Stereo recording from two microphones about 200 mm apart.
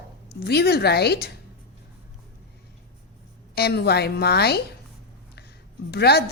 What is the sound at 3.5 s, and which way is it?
A woman's voice, 55° left (ahead or behind).